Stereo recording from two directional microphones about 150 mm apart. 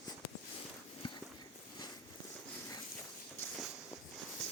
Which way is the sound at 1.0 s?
35° left (ahead or behind).